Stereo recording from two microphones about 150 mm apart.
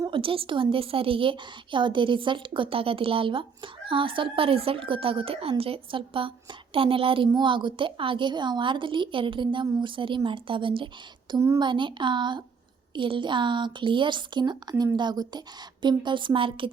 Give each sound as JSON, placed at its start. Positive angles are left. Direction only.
{"t": 0.0, "sound": "a woman's voice", "side_deg": -35}
{"t": 11.3, "sound": "a woman's voice", "side_deg": -20}
{"t": 11.7, "sound": "a woman's voice", "side_deg": -30}